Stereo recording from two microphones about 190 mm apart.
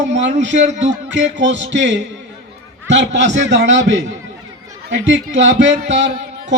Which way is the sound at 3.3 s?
70° right (ahead or behind).